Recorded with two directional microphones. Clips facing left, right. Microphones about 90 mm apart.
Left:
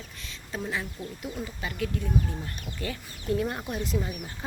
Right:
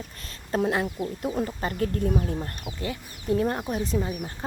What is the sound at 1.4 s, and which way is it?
Speech, 50° right (ahead or behind).